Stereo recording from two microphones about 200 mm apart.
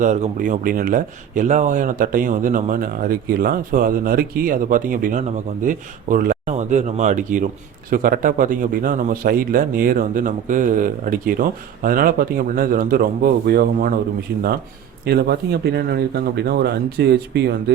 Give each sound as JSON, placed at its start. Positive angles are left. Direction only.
{"t": 0.0, "sound": "speech", "side_deg": -40}
{"t": 15.0, "sound": "speech", "side_deg": -55}